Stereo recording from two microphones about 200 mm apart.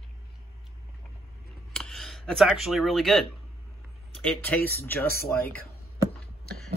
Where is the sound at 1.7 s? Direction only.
Centre (ahead or behind).